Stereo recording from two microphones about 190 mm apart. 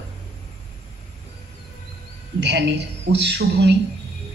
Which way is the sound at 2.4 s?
65° right (ahead or behind).